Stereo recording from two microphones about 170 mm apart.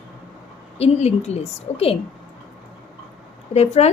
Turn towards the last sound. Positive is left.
turn(degrees=40)  # may be behind; listen again after turning